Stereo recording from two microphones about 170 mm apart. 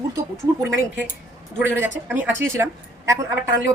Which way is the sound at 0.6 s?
15° right (ahead or behind).